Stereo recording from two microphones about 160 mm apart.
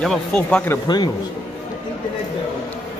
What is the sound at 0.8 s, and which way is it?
Speech, 25° left (ahead or behind).